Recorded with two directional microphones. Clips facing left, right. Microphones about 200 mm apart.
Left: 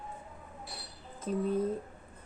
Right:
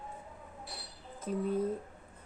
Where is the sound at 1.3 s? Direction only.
10° right (ahead or behind).